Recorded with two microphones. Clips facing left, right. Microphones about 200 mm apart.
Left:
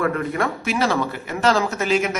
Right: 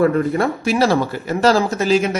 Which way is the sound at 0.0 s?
30° right (ahead or behind).